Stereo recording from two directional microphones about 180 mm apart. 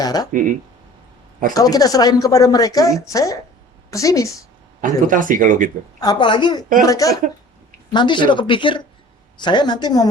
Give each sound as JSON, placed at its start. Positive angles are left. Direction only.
{"t": 0.0, "sound": "speech", "side_deg": 20}
{"t": 0.3, "sound": "speech", "side_deg": -45}
{"t": 1.5, "sound": "a woman's voice", "side_deg": 20}
{"t": 4.8, "sound": "speech", "side_deg": -50}
{"t": 6.0, "sound": "speech", "side_deg": 25}